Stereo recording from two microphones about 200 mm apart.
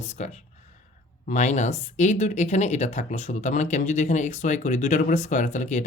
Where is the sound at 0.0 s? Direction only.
35° left (ahead or behind).